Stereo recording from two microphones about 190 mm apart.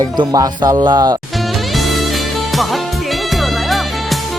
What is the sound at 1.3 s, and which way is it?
Music, centre (ahead or behind).